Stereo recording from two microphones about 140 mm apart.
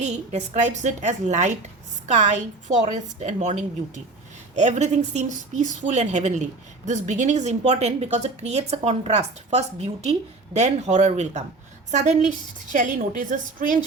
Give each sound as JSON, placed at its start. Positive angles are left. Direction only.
{"t": 0.0, "sound": "a woman's voice", "side_deg": -55}
{"t": 2.6, "sound": "a woman's voice", "side_deg": -60}